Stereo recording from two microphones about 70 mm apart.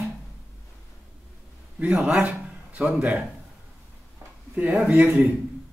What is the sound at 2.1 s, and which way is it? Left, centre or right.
Speech, right.